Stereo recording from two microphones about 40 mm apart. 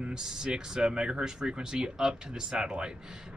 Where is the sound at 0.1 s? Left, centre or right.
Centre.